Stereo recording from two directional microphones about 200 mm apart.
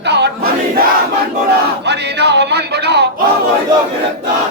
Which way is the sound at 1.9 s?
60° right (ahead or behind).